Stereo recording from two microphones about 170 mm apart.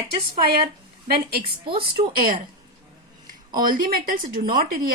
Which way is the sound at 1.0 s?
65° right (ahead or behind).